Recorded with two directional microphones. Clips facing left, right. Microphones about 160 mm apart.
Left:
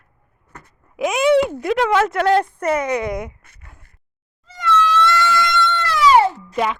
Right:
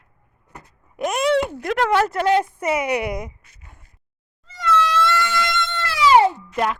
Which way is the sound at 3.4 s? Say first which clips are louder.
Left 2 dB; 60° left (ahead or behind).